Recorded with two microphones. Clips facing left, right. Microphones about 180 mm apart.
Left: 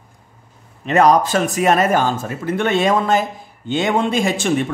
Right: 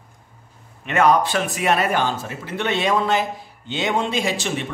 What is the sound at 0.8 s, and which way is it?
Speech, 35° left (ahead or behind).